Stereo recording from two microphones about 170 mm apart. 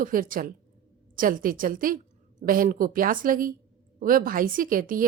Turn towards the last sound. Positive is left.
turn(degrees=-55)  # may be behind; listen again after turning